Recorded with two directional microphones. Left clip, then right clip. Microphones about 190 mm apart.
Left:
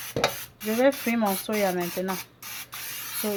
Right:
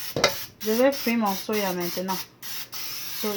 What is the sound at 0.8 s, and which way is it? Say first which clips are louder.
Speech: even; 25° left (ahead or behind).